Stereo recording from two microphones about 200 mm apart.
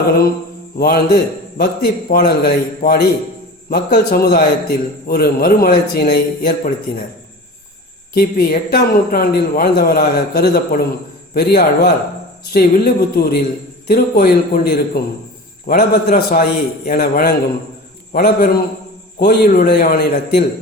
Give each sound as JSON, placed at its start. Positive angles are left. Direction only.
{"t": 0.8, "sound": "a man's voice", "side_deg": 50}
{"t": 8.1, "sound": "a man's voice", "side_deg": 50}